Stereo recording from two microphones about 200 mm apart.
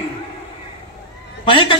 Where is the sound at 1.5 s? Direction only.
25° left (ahead or behind).